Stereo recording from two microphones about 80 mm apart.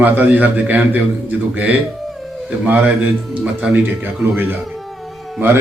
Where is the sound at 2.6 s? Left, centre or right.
Centre.